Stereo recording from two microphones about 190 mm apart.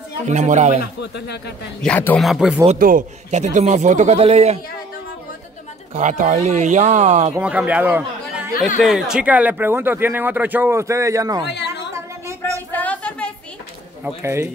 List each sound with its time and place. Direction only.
0.3 s speech: 40° right (ahead or behind)
1.1 s speech: 60° left (ahead or behind)
1.8 s a man's voice: 5° left (ahead or behind)
2.6 s speech: 40° right (ahead or behind)
5.9 s speech: 40° right (ahead or behind)
7.3 s speech: 10° right (ahead or behind)
11.4 s a sound: 65° left (ahead or behind)
12.7 s a sound: 5° left (ahead or behind)
14.0 s speech: 15° right (ahead or behind)